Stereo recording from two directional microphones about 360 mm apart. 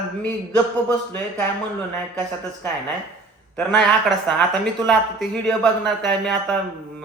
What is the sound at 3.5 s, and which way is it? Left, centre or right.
Speech, centre.